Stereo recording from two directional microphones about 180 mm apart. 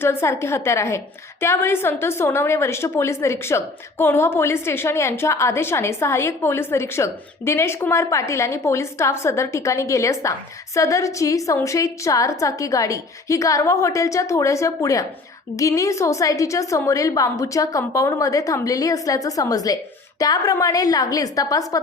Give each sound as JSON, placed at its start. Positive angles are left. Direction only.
{"t": 0.0, "sound": "a woman's voice", "side_deg": 15}